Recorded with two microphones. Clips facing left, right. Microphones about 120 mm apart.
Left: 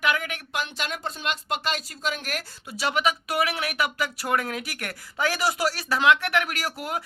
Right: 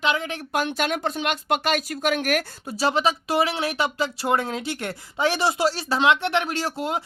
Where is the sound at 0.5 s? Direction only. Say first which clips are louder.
Right 8 dB; 50° right (ahead or behind).